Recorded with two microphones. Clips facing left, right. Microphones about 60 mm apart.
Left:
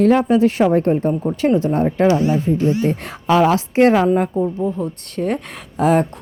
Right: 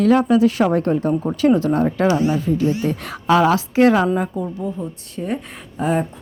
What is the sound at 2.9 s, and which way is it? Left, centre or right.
Speech, left.